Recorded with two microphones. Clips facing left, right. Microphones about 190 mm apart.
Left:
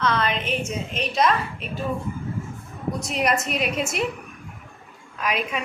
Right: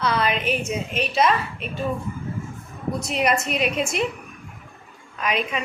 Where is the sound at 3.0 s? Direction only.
Centre (ahead or behind).